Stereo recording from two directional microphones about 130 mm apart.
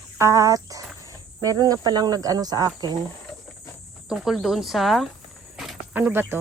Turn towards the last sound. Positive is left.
turn(degrees=-15)  # may be behind; listen again after turning